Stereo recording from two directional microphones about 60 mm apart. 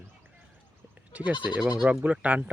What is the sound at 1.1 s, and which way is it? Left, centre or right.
Speech, right.